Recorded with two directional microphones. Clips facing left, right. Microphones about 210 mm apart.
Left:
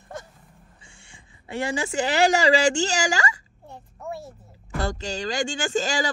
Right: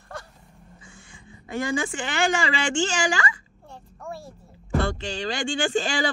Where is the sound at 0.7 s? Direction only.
30° left (ahead or behind).